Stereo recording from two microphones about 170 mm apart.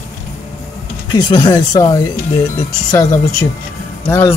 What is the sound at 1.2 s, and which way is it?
A man's voice, 20° left (ahead or behind).